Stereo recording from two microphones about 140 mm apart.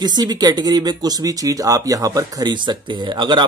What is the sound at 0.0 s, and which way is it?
Speech, 30° right (ahead or behind).